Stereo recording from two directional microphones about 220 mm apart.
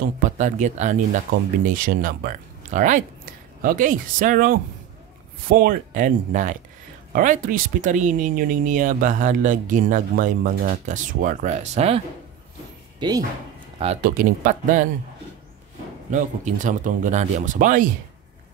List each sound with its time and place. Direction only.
0.0 s speech: 35° right (ahead or behind)
13.0 s speech: 20° right (ahead or behind)
14.0 s speech: 40° right (ahead or behind)
16.1 s speech: 35° right (ahead or behind)